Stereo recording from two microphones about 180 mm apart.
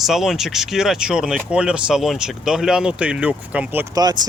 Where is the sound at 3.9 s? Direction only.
20° right (ahead or behind).